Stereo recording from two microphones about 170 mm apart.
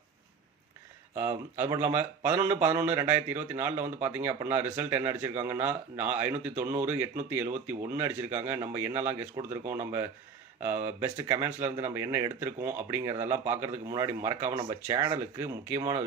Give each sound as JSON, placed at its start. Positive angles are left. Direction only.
{"t": 1.1, "sound": "speech", "side_deg": -15}
{"t": 11.2, "sound": "speech", "side_deg": -20}